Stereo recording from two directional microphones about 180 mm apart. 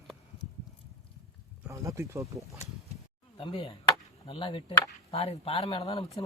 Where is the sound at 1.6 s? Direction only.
15° right (ahead or behind).